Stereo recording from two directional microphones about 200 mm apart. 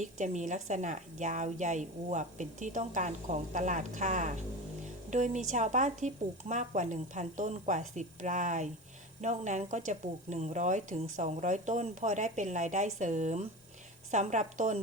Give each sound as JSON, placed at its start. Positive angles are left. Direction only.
{"t": 0.0, "sound": "a woman's voice", "side_deg": -40}